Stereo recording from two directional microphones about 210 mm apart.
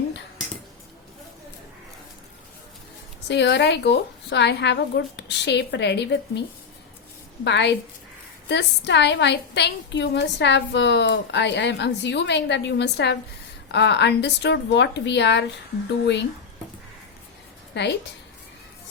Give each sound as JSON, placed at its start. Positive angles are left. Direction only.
{"t": 3.2, "sound": "a woman's voice", "side_deg": 55}
{"t": 7.4, "sound": "a woman's voice", "side_deg": 55}
{"t": 17.7, "sound": "a woman's voice", "side_deg": 55}